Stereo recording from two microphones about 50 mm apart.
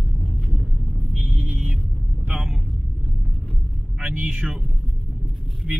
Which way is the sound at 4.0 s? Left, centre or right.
Right.